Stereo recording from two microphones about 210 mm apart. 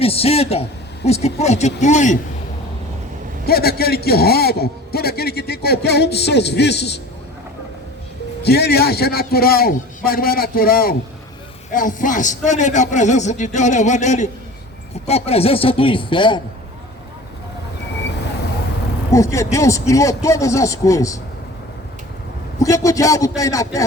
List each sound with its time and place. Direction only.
0.0 s a man's voice: 30° left (ahead or behind)
3.4 s a man's voice: 45° left (ahead or behind)
8.4 s a man's voice: 50° left (ahead or behind); by 16.4 s 20° left (ahead or behind)
19.1 s a man's voice: 15° left (ahead or behind)
22.6 s a man's voice: 15° left (ahead or behind)